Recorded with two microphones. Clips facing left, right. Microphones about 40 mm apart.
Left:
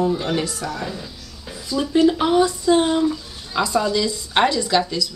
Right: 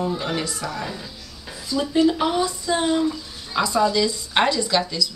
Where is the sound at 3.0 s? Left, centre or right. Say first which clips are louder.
Left 2 dB; centre.